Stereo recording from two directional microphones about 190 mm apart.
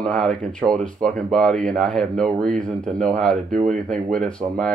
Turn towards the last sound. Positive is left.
turn(degrees=5)  # may be behind; listen again after turning